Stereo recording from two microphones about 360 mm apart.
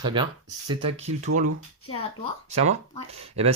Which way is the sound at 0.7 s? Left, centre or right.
Centre.